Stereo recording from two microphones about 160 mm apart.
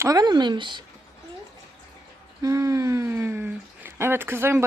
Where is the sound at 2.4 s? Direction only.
20° right (ahead or behind).